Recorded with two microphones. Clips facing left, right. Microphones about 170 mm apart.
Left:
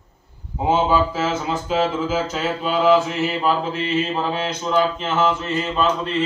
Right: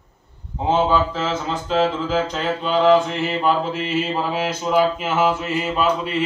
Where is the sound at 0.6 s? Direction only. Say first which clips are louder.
Even; 10° left (ahead or behind).